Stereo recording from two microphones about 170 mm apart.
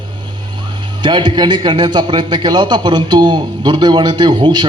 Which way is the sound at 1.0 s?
25° right (ahead or behind).